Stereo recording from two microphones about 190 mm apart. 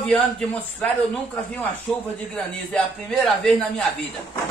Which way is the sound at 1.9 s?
5° left (ahead or behind).